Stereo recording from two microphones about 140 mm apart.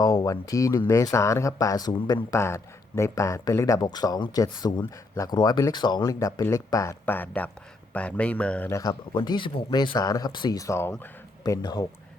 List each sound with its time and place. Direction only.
0.0 s speech: 25° left (ahead or behind); by 8.8 s 10° left (ahead or behind)
8.8 s speech: 30° left (ahead or behind)